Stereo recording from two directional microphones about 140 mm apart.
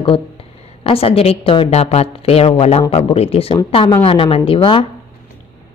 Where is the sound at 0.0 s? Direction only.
40° left (ahead or behind).